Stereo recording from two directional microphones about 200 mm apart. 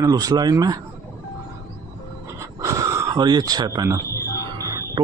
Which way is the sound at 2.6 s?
15° right (ahead or behind).